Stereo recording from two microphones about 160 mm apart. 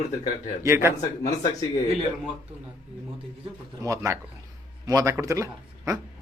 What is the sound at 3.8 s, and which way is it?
A man's voice, 20° right (ahead or behind).